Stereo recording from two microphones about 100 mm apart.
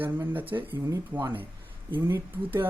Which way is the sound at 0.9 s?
45° right (ahead or behind).